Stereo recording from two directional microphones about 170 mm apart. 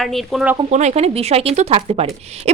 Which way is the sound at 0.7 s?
40° right (ahead or behind).